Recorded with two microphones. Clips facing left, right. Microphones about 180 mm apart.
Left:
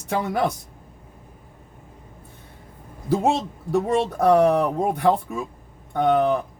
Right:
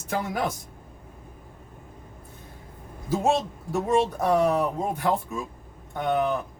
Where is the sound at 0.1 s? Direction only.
65° left (ahead or behind).